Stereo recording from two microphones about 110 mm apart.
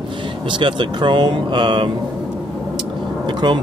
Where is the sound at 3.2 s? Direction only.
45° right (ahead or behind).